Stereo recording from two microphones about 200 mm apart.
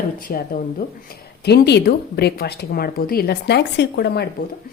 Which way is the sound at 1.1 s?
55° left (ahead or behind).